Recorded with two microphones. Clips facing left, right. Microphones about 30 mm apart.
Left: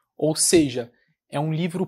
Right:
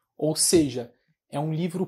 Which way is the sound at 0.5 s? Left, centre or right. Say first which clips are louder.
Left 3 dB; left.